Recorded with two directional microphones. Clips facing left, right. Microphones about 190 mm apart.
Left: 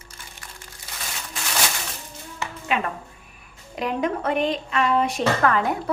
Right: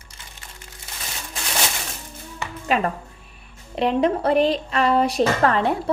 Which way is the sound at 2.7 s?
40° right (ahead or behind).